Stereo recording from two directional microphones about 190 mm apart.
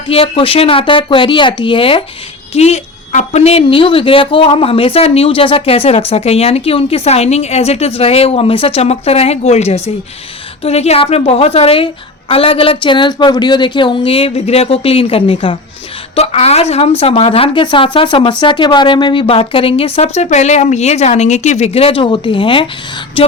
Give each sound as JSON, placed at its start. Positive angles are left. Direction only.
{"t": 0.1, "sound": "speech", "side_deg": 30}